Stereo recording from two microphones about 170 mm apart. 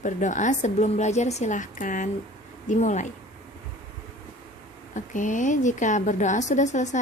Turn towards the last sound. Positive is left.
turn(degrees=45)  # may be behind; listen again after turning